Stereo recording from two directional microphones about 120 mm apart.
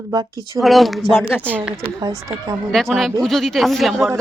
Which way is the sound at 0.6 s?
Centre (ahead or behind).